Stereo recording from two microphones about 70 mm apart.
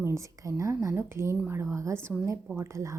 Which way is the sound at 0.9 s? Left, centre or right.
Right.